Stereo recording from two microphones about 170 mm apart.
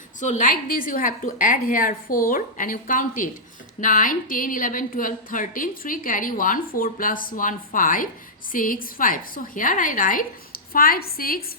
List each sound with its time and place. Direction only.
0.2 s a woman's voice: 45° left (ahead or behind)